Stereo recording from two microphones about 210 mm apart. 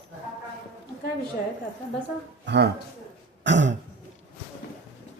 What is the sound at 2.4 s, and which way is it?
Speech, 55° right (ahead or behind).